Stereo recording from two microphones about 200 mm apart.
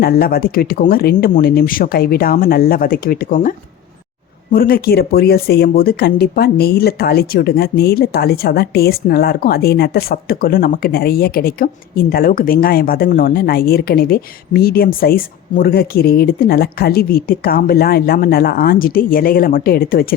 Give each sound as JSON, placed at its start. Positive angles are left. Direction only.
{"t": 0.0, "sound": "speech", "side_deg": 50}
{"t": 4.5, "sound": "speech", "side_deg": 50}